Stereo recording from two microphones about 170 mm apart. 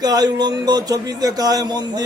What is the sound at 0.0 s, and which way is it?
A man's voice, 25° right (ahead or behind).